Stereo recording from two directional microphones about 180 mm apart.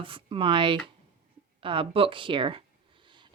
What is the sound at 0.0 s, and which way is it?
Speech, 30° right (ahead or behind).